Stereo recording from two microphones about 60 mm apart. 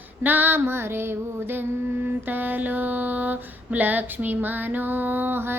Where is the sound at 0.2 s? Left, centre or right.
Right.